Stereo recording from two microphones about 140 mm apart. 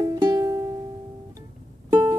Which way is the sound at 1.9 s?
25° right (ahead or behind).